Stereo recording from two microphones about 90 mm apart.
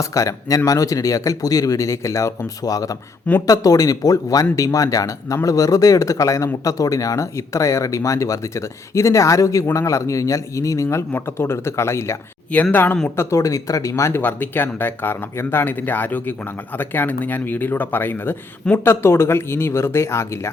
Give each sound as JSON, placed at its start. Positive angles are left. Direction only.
{"t": 0.0, "sound": "speech", "side_deg": 40}
{"t": 10.8, "sound": "speech", "side_deg": 25}
{"t": 13.1, "sound": "speech", "side_deg": 35}
{"t": 14.2, "sound": "speech", "side_deg": 20}